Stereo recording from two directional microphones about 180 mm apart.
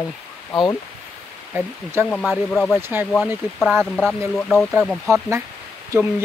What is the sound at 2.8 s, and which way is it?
Speech, 10° right (ahead or behind).